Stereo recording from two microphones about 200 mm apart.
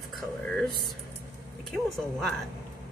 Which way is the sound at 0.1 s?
5° left (ahead or behind).